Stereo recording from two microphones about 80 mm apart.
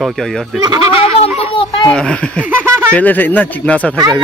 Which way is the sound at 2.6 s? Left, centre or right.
Right.